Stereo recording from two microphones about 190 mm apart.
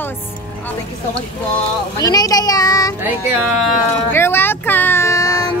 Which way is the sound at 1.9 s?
20° left (ahead or behind).